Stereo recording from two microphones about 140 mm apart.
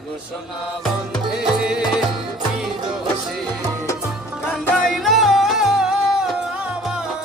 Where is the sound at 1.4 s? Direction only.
5° right (ahead or behind).